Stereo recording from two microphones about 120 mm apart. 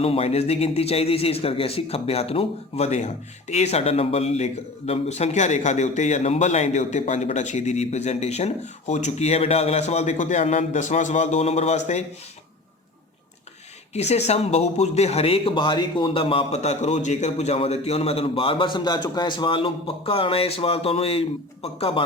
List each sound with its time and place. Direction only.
0.0 s speech: 55° left (ahead or behind)
13.9 s speech: 65° left (ahead or behind); by 16.5 s 50° left (ahead or behind)
16.5 s a man's voice: 70° left (ahead or behind); by 22.0 s 55° left (ahead or behind)